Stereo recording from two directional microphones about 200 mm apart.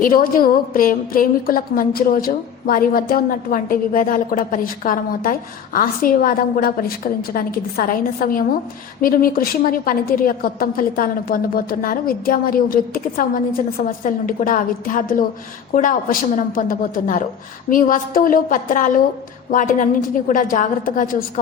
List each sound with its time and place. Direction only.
0.0 s a woman's voice: 45° left (ahead or behind)